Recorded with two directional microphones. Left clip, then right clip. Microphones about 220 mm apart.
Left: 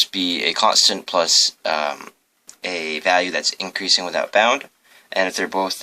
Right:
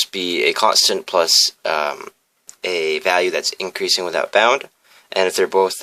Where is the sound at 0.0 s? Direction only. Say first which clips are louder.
Right 1 dB; 35° right (ahead or behind).